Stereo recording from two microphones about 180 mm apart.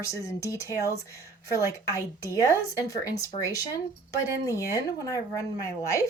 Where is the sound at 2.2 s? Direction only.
20° left (ahead or behind).